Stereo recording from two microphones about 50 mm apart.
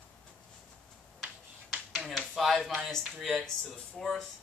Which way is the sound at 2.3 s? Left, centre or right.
Centre.